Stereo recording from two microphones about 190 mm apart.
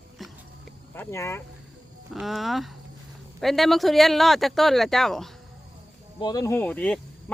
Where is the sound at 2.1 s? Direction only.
Centre (ahead or behind).